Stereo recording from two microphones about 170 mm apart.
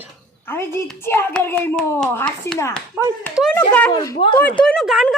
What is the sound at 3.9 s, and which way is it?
Speech, 30° left (ahead or behind).